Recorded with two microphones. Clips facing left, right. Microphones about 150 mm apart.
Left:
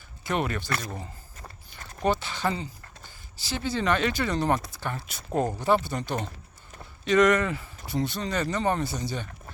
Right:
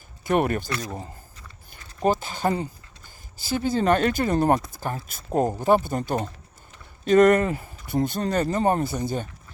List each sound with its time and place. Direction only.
0.3 s speech: 50° right (ahead or behind)
2.0 s speech: 45° right (ahead or behind)